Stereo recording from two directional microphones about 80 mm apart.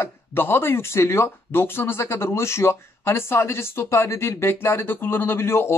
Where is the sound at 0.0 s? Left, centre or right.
Left.